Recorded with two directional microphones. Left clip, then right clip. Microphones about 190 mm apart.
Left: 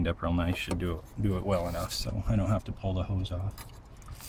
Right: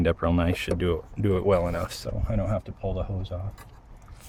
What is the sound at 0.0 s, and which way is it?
Speech, 50° right (ahead or behind).